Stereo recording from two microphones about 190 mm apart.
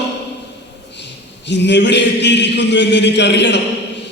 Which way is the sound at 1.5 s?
65° left (ahead or behind).